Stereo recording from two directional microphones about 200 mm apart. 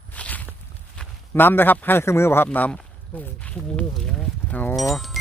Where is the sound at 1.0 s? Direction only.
10° left (ahead or behind).